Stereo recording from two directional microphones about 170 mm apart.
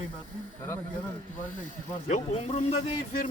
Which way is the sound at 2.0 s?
40° left (ahead or behind).